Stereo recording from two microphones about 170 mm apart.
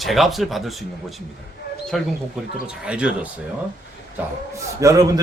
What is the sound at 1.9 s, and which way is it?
A man's voice, centre (ahead or behind).